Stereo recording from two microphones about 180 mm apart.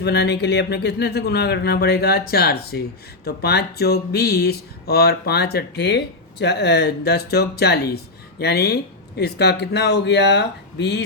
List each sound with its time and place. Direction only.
0.0 s speech: 70° left (ahead or behind)